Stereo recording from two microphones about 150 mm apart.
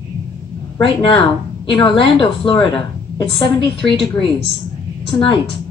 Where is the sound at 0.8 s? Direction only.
35° left (ahead or behind).